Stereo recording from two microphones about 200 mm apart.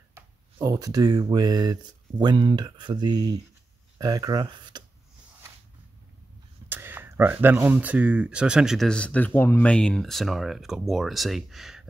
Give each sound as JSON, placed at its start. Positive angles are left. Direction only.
{"t": 0.1, "sound": "speech", "side_deg": -15}
{"t": 6.7, "sound": "speech", "side_deg": -10}